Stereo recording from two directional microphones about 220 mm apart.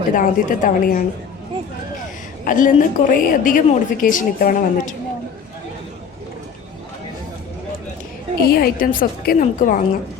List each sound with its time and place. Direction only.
0.1 s a woman's voice: 35° left (ahead or behind)
2.4 s a woman's voice: 35° left (ahead or behind)
8.4 s a woman's voice: 45° left (ahead or behind)